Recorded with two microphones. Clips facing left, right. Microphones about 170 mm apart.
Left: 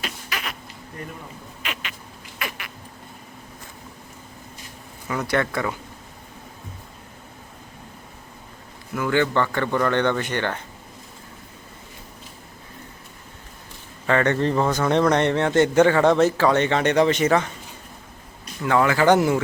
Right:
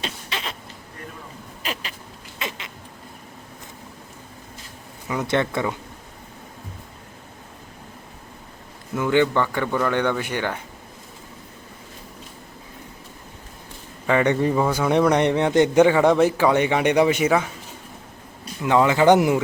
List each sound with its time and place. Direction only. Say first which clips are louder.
0.0 s a sound: right 1 dB; 25° right (ahead or behind)
1.6 s rodents: right 3 dB; 35° right (ahead or behind)
2.4 s vehicle: right 1 dB; 20° right (ahead or behind)
5.0 s speech: right 1 dB; 20° right (ahead or behind)
9.0 s a man's voice: right 2 dB; 15° right (ahead or behind)
14.1 s a man's voice: right 1 dB; 10° right (ahead or behind)
18.6 s speech: right 2 dB; 20° right (ahead or behind)